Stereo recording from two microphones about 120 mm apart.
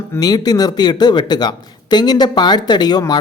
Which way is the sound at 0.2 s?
35° left (ahead or behind).